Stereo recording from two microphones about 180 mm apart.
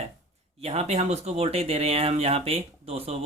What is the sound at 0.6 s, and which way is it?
Speech, 35° right (ahead or behind).